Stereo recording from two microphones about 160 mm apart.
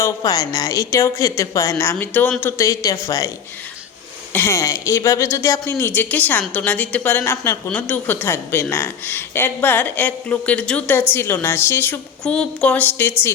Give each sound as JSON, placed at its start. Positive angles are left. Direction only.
{"t": 0.0, "sound": "a woman's voice", "side_deg": 25}
{"t": 4.3, "sound": "speech", "side_deg": 15}